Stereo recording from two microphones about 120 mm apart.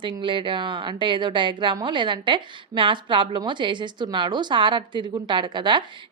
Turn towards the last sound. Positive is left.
turn(degrees=-40)  # may be behind; listen again after turning